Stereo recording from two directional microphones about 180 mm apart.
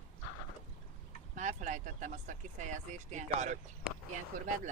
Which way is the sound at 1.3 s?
45° right (ahead or behind).